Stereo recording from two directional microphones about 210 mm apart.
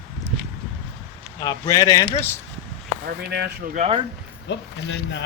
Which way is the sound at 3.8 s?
25° right (ahead or behind).